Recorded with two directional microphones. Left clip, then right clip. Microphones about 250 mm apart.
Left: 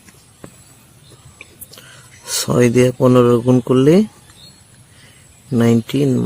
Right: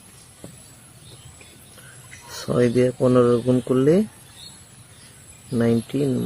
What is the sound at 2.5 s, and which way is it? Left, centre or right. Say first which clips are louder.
Speech: left 5 dB; left.